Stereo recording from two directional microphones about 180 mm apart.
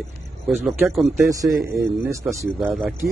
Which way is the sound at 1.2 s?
15° right (ahead or behind).